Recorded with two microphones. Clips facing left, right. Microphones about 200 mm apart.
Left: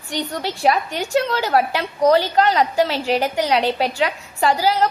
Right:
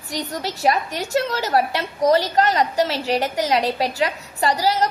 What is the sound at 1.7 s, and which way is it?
A woman's voice, centre (ahead or behind).